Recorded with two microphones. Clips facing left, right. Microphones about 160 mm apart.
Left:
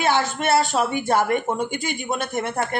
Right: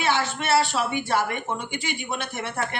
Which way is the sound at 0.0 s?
45° left (ahead or behind).